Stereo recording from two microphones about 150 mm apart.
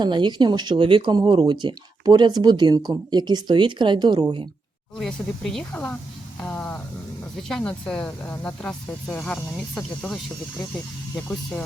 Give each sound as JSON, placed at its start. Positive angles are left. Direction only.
{"t": 0.0, "sound": "speech", "side_deg": -30}
{"t": 4.9, "sound": "speech", "side_deg": 0}
{"t": 6.4, "sound": "a sound", "side_deg": 10}
{"t": 7.3, "sound": "speech", "side_deg": 5}